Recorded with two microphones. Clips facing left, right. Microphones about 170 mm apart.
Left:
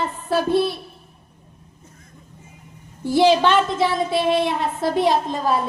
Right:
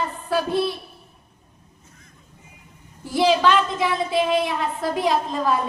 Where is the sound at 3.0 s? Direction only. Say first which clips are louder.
Left 3 dB; 30° left (ahead or behind).